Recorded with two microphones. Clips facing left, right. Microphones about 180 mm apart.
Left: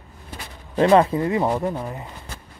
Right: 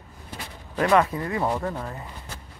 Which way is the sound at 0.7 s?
25° left (ahead or behind).